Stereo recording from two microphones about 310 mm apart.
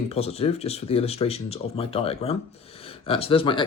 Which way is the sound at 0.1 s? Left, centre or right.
Centre.